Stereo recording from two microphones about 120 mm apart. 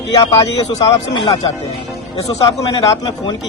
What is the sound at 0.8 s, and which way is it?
Speech, 40° left (ahead or behind).